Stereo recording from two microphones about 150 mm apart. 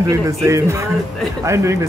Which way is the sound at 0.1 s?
20° right (ahead or behind).